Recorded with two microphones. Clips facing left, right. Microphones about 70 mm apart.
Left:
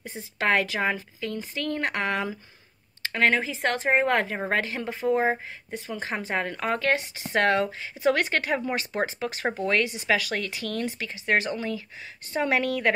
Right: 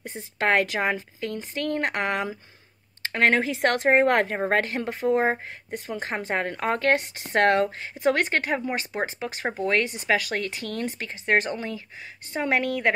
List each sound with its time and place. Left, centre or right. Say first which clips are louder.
0.0 s speech: right 1 dB; right
3.0 s speech: right 2 dB; right
3.4 s a woman's voice: right 4 dB; right
4.0 s speech: right 3 dB; right
5.0 s speech: right 1 dB; right